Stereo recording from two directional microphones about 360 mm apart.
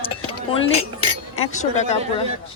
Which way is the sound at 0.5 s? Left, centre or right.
Centre.